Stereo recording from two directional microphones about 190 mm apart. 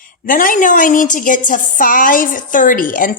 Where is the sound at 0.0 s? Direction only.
45° left (ahead or behind).